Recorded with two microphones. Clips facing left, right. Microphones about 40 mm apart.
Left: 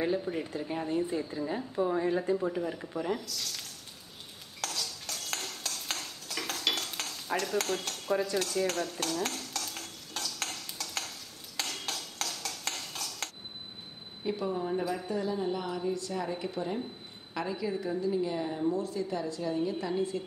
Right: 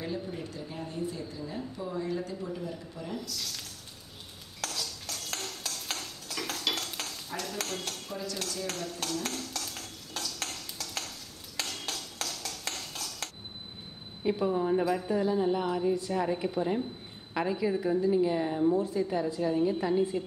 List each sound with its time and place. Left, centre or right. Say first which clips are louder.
0.0 s speech: left 5 dB; left
3.2 s speech: right 1 dB; centre
4.6 s a sound: even; centre
8.4 s stir: left 5 dB; centre
14.2 s a woman's voice: right 4 dB; centre